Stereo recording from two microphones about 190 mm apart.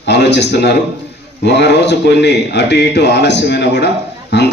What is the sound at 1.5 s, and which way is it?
Speech, 65° left (ahead or behind).